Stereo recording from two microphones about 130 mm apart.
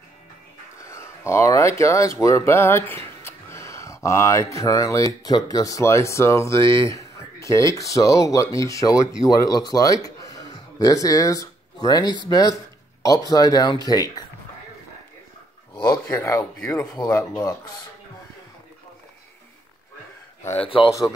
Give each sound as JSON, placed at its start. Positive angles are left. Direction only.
{"t": 0.7, "sound": "speech", "side_deg": 20}
{"t": 10.0, "sound": "a sound", "side_deg": 25}
{"t": 12.3, "sound": "speech", "side_deg": 25}
{"t": 15.8, "sound": "speech", "side_deg": 25}
{"t": 16.5, "sound": "speech", "side_deg": 10}
{"t": 16.8, "sound": "speech", "side_deg": 30}
{"t": 20.5, "sound": "speech", "side_deg": 45}